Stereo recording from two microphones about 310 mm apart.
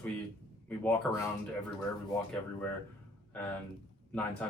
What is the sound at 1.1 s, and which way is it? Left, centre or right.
Speech, centre.